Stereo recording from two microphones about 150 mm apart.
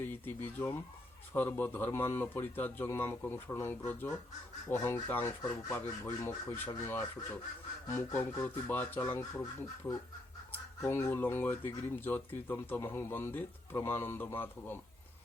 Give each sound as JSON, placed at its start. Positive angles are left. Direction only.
{"t": 0.0, "sound": "speech", "side_deg": 15}